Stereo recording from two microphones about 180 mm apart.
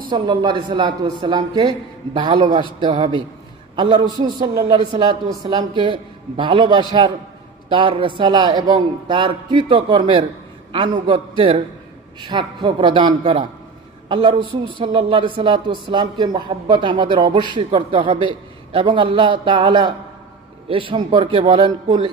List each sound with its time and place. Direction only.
0.1 s speech: 25° right (ahead or behind)